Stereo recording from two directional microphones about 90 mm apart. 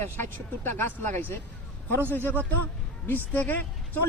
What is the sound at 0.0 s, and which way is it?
Speech, 25° left (ahead or behind).